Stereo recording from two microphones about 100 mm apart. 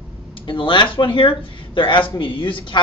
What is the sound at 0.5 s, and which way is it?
A man's voice, 55° left (ahead or behind).